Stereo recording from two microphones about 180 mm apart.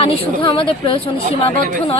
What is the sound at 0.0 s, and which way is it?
Speech, 30° left (ahead or behind).